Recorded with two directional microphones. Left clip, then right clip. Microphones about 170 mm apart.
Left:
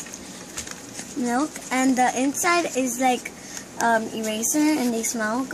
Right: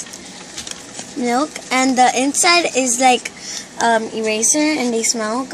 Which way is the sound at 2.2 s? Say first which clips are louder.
Right 7 dB; 55° right (ahead or behind).